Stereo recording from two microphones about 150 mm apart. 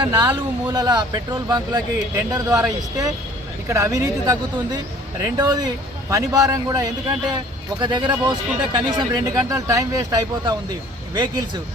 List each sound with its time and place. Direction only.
0.0 s speech: 25° right (ahead or behind)